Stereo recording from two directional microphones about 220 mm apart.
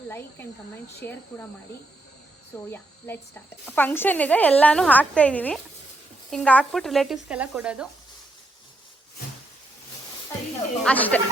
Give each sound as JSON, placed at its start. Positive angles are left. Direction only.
{"t": 0.1, "sound": "speech", "side_deg": 10}
{"t": 2.5, "sound": "a woman's voice", "side_deg": 10}
{"t": 10.8, "sound": "speech", "side_deg": 5}